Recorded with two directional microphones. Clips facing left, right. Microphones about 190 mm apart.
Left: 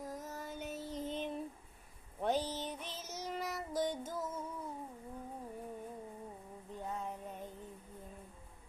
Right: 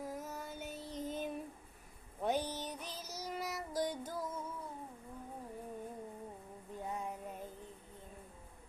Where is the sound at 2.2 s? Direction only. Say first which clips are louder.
Left 1 dB; 10° right (ahead or behind).